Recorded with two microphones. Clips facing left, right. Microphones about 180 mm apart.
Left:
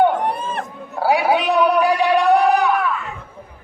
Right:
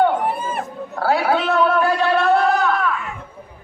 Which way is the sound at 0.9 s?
15° left (ahead or behind).